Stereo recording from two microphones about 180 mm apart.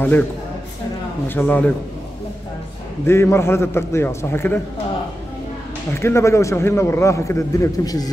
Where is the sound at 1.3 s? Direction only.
10° left (ahead or behind).